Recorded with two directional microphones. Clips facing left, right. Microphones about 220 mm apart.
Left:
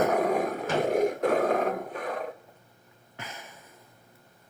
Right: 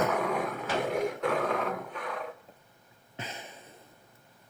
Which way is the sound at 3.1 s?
20° right (ahead or behind).